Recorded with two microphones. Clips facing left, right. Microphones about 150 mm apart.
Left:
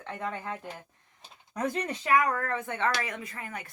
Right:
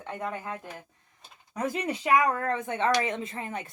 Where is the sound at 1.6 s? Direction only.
5° right (ahead or behind).